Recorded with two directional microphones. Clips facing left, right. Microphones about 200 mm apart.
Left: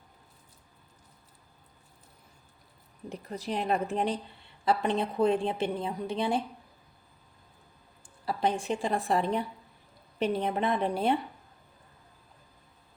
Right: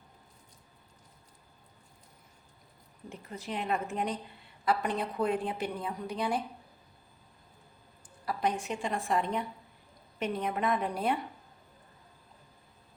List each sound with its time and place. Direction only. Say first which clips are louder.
3.1 s a woman's voice: left 5 dB; 35° left (ahead or behind)
8.2 s a woman's voice: left 3 dB; 30° left (ahead or behind)